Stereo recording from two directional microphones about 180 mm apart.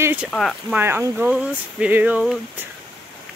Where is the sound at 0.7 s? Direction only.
10° right (ahead or behind).